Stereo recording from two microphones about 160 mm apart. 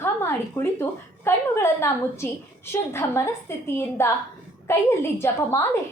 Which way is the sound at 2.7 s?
15° left (ahead or behind).